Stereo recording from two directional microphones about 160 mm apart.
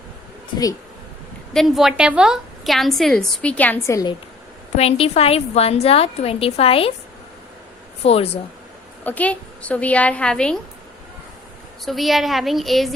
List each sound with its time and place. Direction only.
1.5 s a woman's voice: centre (ahead or behind); by 4.1 s 20° left (ahead or behind)
4.8 s a woman's voice: 40° left (ahead or behind)
8.0 s a woman's voice: 40° left (ahead or behind)
9.0 s a woman's voice: 10° left (ahead or behind)
11.9 s a woman's voice: centre (ahead or behind)